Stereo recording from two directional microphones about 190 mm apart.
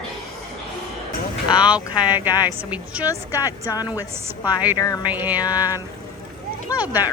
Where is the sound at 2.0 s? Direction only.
20° left (ahead or behind).